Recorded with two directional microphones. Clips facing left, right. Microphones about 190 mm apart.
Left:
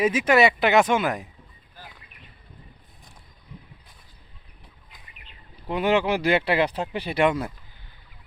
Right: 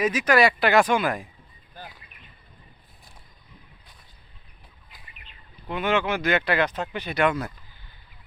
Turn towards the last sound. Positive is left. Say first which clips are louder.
# left 2 dB
turn(degrees=25)  # may be behind; listen again after turning